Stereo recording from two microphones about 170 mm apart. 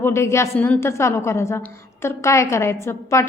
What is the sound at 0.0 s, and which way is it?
A woman's voice, 15° left (ahead or behind).